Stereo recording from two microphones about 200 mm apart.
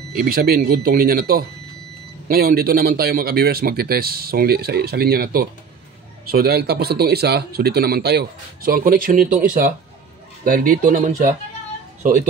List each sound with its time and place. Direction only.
0.2 s speech: 45° right (ahead or behind)